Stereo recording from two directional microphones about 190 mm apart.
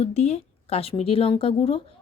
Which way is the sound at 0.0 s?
35° left (ahead or behind).